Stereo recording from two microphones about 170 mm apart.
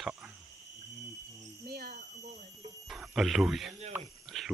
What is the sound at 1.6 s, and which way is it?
Speech, 70° right (ahead or behind).